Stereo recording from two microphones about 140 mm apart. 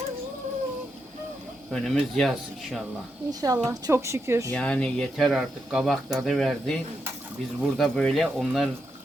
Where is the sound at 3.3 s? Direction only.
25° right (ahead or behind).